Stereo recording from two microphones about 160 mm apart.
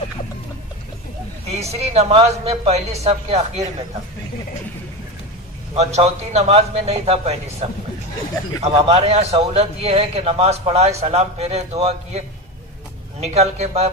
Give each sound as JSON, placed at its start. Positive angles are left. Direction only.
{"t": 1.6, "sound": "a man's voice", "side_deg": -40}
{"t": 5.8, "sound": "a man's voice", "side_deg": -40}
{"t": 8.5, "sound": "a man's voice", "side_deg": -40}
{"t": 13.2, "sound": "a man's voice", "side_deg": -40}